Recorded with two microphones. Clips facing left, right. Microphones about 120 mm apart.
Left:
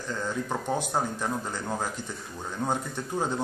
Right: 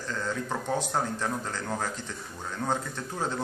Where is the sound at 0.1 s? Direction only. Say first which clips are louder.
Left 1 dB; 15° left (ahead or behind).